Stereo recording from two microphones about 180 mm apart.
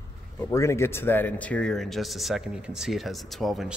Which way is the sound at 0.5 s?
15° left (ahead or behind).